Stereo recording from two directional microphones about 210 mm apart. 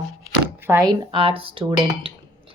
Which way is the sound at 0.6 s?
10° right (ahead or behind).